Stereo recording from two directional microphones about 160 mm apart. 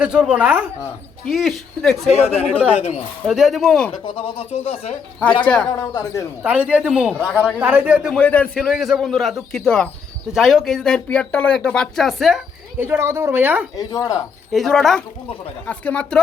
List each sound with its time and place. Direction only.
0.0 s speech: 5° right (ahead or behind)
2.0 s speech: 40° left (ahead or behind)
3.2 s speech: centre (ahead or behind)
4.0 s speech: 30° left (ahead or behind)
5.5 s speech: 5° left (ahead or behind)
5.9 s speech: 25° left (ahead or behind)
6.4 s speech: 10° right (ahead or behind)
8.1 s speech: 10° left (ahead or behind)
12.8 s speech: 15° right (ahead or behind)
13.7 s speech: 20° left (ahead or behind)
14.5 s speech: centre (ahead or behind)